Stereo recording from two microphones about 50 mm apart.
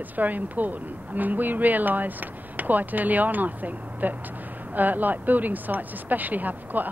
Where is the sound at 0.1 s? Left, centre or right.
Right.